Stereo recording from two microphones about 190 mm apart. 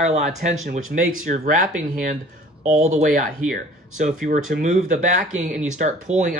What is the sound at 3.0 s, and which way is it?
Speech, 45° right (ahead or behind).